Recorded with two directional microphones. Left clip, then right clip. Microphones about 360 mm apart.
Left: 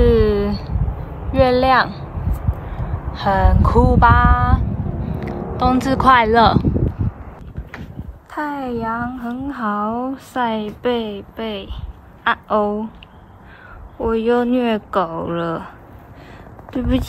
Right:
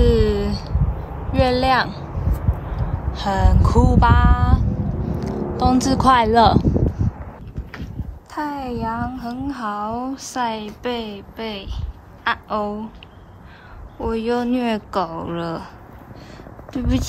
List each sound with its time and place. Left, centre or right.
0.0 s a sound: centre
1.3 s vehicle: centre
3.1 s speech: centre
8.3 s a woman's voice: centre
13.9 s a woman's voice: centre
16.7 s a woman's voice: centre